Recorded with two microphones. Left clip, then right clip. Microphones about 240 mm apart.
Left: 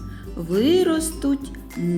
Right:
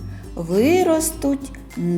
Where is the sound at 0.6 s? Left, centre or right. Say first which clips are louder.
Right 2 dB; centre.